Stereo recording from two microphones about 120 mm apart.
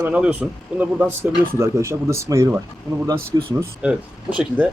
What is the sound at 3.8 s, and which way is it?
Speech, 10° right (ahead or behind).